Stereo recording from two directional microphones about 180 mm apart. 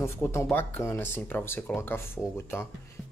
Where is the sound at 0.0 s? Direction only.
15° left (ahead or behind).